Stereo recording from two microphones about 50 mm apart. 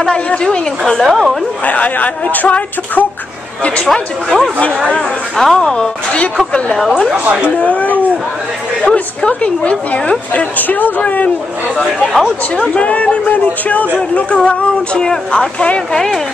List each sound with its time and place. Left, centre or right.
0.0 s speech: centre
1.0 s a woman's voice: centre
1.7 s a sound: left
3.8 s speech: centre
7.2 s speech: right
7.5 s a woman's voice: left
12.7 s a woman's voice: left